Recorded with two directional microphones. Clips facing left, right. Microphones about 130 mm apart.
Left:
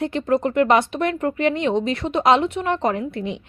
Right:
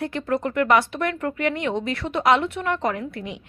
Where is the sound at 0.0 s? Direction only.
25° left (ahead or behind).